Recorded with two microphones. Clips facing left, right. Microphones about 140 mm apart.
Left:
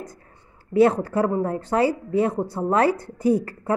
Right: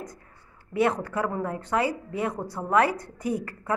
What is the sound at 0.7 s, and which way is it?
Speech, 30° left (ahead or behind).